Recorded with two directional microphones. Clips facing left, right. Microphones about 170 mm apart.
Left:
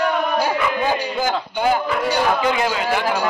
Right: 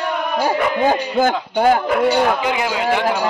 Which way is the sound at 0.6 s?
50° right (ahead or behind).